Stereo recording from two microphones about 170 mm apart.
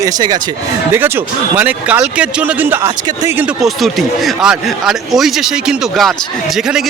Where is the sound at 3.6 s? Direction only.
Centre (ahead or behind).